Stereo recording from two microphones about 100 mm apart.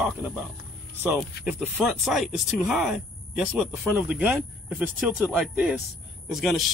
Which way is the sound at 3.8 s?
15° right (ahead or behind).